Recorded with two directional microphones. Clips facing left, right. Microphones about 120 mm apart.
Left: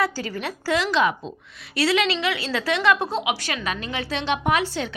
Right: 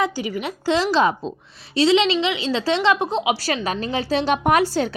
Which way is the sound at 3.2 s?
35° right (ahead or behind).